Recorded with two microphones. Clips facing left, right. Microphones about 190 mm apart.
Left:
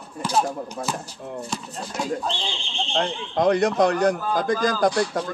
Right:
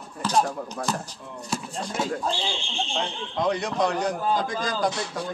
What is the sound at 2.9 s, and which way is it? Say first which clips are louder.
A man's voice: left 7 dB; 55° left (ahead or behind).